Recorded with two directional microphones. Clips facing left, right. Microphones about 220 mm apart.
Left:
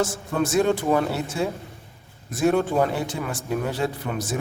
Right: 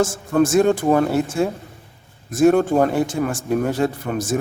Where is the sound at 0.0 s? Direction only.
45° right (ahead or behind).